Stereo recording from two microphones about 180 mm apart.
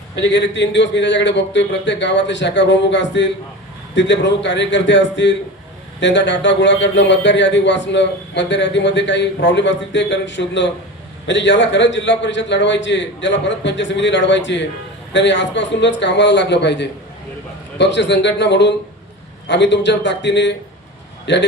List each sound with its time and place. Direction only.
0.2 s a man's voice: 80° left